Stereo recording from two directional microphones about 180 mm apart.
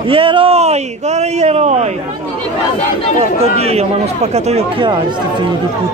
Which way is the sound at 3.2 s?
35° right (ahead or behind).